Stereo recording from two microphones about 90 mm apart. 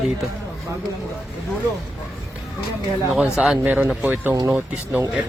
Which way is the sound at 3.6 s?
20° right (ahead or behind).